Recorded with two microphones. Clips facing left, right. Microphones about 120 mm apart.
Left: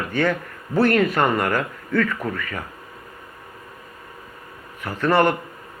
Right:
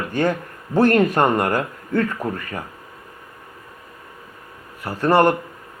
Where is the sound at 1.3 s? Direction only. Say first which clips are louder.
Right 2 dB; 40° right (ahead or behind).